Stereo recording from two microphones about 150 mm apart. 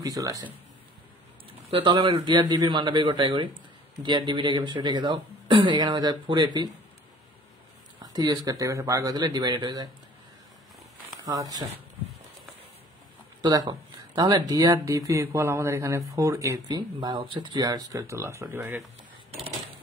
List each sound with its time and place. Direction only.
0.0 s speech: 25° right (ahead or behind)
1.7 s speech: 35° right (ahead or behind)
8.0 s speech: 25° right (ahead or behind)
11.2 s speech: 25° right (ahead or behind)
13.4 s speech: 25° right (ahead or behind)